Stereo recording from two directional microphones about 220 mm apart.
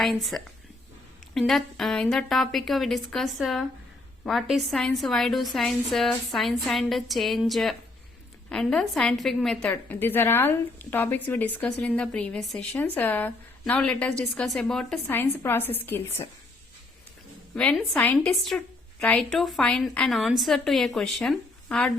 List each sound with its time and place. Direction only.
0.0 s a woman's voice: centre (ahead or behind)
17.5 s a woman's voice: 5° left (ahead or behind)